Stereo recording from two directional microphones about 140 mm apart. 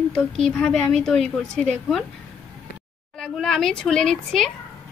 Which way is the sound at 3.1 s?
5° left (ahead or behind).